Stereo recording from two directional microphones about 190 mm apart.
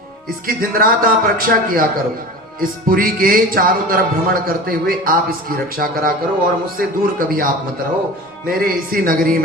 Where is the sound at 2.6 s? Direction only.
50° right (ahead or behind).